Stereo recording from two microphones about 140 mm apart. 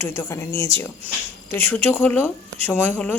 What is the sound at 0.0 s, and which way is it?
Speech, 20° left (ahead or behind).